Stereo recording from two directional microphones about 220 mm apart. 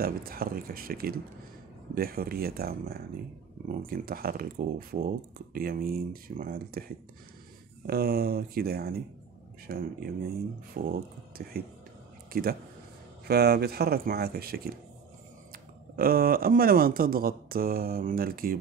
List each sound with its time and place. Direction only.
0.0 s speech: 40° right (ahead or behind)
7.8 s speech: 45° right (ahead or behind)